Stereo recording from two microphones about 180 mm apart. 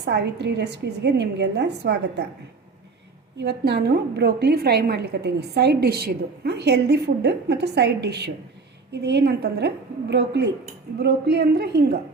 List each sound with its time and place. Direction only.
0.0 s a woman's voice: 70° right (ahead or behind)
3.3 s a woman's voice: 65° right (ahead or behind)